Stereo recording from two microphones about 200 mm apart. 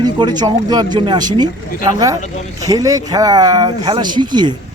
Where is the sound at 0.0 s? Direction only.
20° right (ahead or behind).